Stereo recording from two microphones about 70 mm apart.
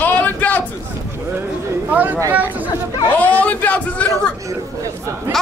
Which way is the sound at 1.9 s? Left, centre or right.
Right.